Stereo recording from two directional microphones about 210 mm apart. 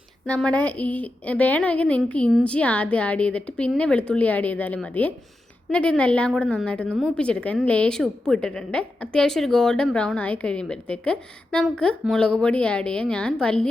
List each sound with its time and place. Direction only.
0.3 s a woman's voice: 5° left (ahead or behind)